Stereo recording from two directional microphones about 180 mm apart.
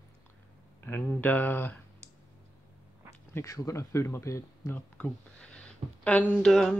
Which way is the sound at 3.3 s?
15° left (ahead or behind).